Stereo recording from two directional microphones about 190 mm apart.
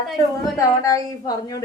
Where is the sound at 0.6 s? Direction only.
15° left (ahead or behind).